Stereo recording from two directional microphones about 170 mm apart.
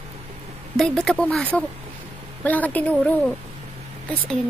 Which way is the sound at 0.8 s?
5° left (ahead or behind).